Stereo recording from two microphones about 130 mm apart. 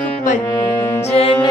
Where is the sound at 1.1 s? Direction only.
50° left (ahead or behind).